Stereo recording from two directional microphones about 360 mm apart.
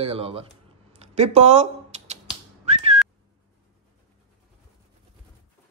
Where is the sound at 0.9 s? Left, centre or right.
Centre.